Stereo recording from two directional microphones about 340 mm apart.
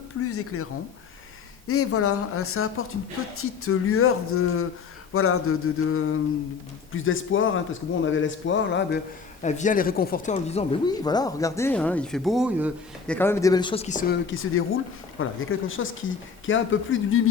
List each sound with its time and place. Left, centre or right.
0.3 s speech: left
9.4 s speech: left
14.3 s speech: left